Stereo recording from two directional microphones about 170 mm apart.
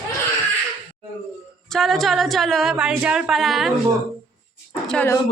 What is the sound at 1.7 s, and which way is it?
A woman's voice, centre (ahead or behind).